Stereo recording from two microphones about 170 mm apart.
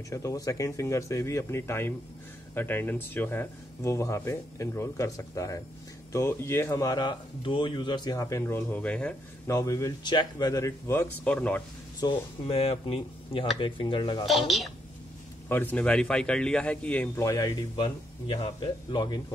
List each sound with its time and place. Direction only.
0.1 s a man's voice: 20° left (ahead or behind)
9.6 s a man's voice: 20° left (ahead or behind)
12.0 s speech: 30° left (ahead or behind)
15.4 s a man's voice: 10° left (ahead or behind)